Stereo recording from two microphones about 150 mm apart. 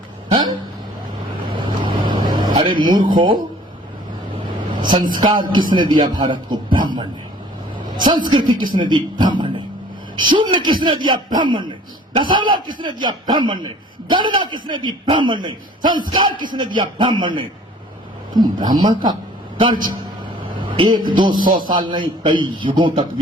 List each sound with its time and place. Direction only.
0.3 s a sound: 30° right (ahead or behind)
1.5 s vehicle: 35° right (ahead or behind)
2.6 s speech: 35° right (ahead or behind)
4.7 s a sound: 30° right (ahead or behind)
5.1 s a man's voice: 30° right (ahead or behind)
18.8 s a man's voice: 30° right (ahead or behind)
20.7 s a man's voice: 30° right (ahead or behind)